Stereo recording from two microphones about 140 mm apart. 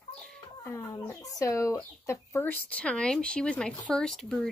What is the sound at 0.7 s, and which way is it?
Speech, 25° left (ahead or behind).